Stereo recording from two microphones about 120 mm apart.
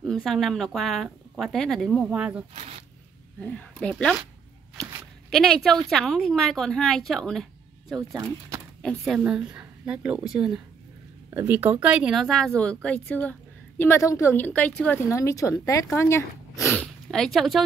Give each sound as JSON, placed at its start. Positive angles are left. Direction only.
{"t": 0.0, "sound": "speech", "side_deg": 0}
{"t": 2.5, "sound": "speech", "side_deg": -65}
{"t": 3.3, "sound": "speech", "side_deg": 10}
{"t": 5.3, "sound": "speech", "side_deg": 0}
{"t": 8.1, "sound": "speech", "side_deg": -25}
{"t": 8.8, "sound": "speech", "side_deg": 0}
{"t": 9.2, "sound": "a woman's voice", "side_deg": -10}
{"t": 11.2, "sound": "speech", "side_deg": -15}
{"t": 14.3, "sound": "speech", "side_deg": 15}
{"t": 15.0, "sound": "speech", "side_deg": 25}
{"t": 16.6, "sound": "speech", "side_deg": 5}